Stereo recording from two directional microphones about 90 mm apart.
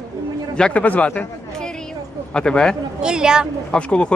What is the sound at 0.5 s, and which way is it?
Speech, 10° left (ahead or behind).